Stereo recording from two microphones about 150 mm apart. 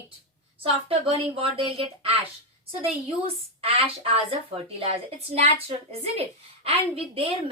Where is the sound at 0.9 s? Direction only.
35° right (ahead or behind).